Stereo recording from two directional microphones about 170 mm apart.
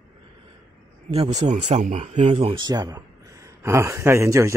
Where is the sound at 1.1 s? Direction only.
40° right (ahead or behind).